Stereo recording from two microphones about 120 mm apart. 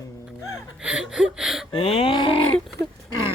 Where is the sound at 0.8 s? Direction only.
10° right (ahead or behind).